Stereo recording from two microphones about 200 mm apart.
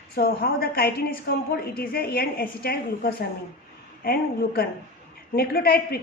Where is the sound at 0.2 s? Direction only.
50° left (ahead or behind).